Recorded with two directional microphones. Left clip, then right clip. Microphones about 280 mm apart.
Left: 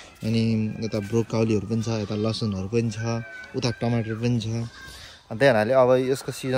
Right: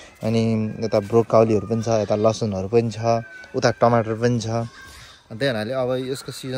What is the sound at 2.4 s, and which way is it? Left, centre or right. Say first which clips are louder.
Speech: right 7 dB; centre.